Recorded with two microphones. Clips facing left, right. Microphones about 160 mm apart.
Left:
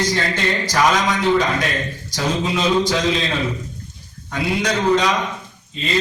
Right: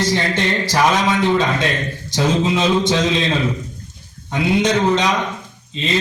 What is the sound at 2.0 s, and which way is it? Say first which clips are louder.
Speech: right 5 dB; 25° right (ahead or behind).